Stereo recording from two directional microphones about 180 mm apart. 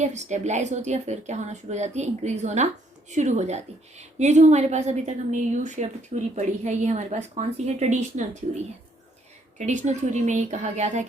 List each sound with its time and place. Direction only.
0.0 s a woman's voice: 40° right (ahead or behind)